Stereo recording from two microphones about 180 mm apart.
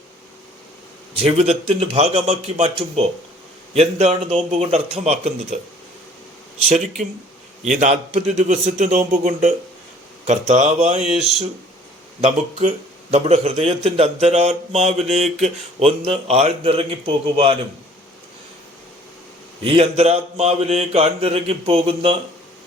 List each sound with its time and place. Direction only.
1.2 s speech: 35° right (ahead or behind)
6.7 s speech: 40° right (ahead or behind)
11.0 s speech: centre (ahead or behind)
12.2 s speech: 35° right (ahead or behind)
19.6 s speech: 35° right (ahead or behind)